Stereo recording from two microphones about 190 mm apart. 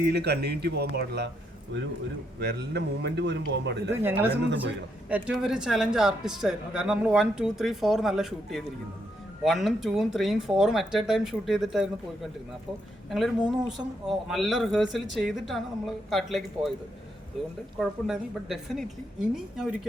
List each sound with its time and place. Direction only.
0.0 s speech: 60° right (ahead or behind)
2.4 s speech: 60° right (ahead or behind)
5.0 s speech: 5° right (ahead or behind)
13.1 s speech: centre (ahead or behind)
17.7 s speech: centre (ahead or behind)